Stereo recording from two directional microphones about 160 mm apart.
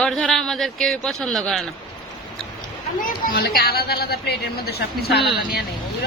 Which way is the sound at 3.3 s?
70° left (ahead or behind).